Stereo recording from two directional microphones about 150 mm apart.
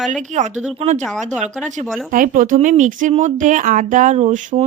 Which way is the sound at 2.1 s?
65° right (ahead or behind).